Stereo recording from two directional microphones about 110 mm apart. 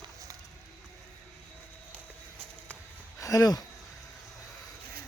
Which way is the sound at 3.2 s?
30° left (ahead or behind).